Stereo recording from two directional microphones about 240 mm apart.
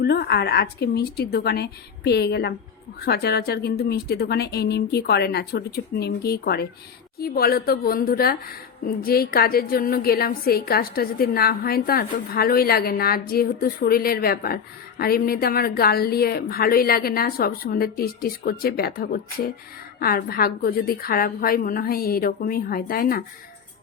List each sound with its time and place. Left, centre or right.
0.0 s a woman's voice: left